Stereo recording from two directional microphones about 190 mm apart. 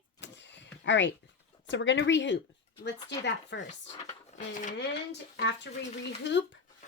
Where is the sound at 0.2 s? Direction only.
70° left (ahead or behind).